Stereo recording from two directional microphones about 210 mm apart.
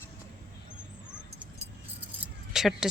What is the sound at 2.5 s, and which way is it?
Speech, centre (ahead or behind).